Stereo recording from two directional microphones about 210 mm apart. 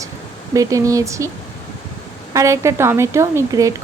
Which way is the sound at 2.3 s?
15° right (ahead or behind).